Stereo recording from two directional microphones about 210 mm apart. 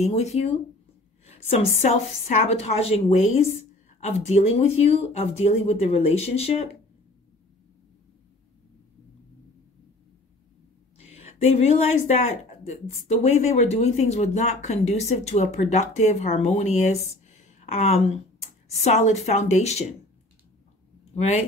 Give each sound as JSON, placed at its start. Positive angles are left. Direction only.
{"t": 0.0, "sound": "speech", "side_deg": 30}
{"t": 11.1, "sound": "speech", "side_deg": 30}
{"t": 21.1, "sound": "speech", "side_deg": 30}